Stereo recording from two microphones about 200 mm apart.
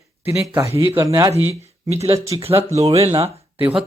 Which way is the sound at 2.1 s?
15° right (ahead or behind).